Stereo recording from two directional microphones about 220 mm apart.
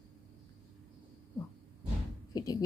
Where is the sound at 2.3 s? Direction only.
15° left (ahead or behind).